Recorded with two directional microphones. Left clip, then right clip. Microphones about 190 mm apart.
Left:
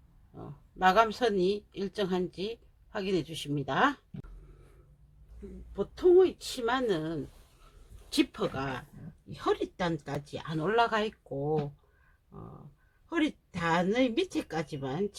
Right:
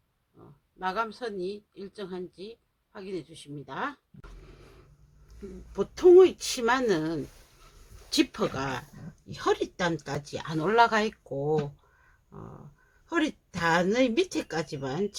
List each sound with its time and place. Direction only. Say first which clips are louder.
0.3 s speech: left 8 dB; 10° right (ahead or behind)
5.7 s speech: right 5 dB; 15° right (ahead or behind)
8.1 s speech: right 3 dB; centre (ahead or behind)